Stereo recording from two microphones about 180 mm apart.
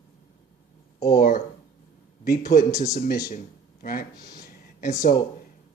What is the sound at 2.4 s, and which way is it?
Speech, 55° left (ahead or behind).